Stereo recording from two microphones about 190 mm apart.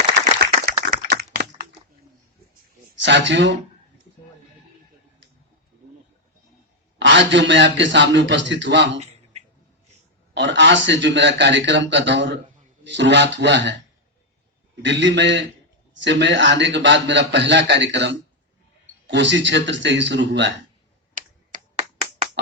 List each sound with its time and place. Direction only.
0.3 s clapping: 50° right (ahead or behind)
3.0 s a man's voice: 70° right (ahead or behind)
7.0 s a man's voice: 70° right (ahead or behind)
10.3 s a man's voice: 70° right (ahead or behind)
14.8 s a man's voice: 70° right (ahead or behind)
21.2 s finger snapping: 40° right (ahead or behind)